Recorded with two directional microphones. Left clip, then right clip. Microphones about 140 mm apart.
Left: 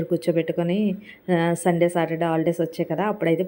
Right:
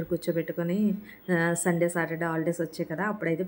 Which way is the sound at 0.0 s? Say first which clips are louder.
Left 7 dB; 30° left (ahead or behind).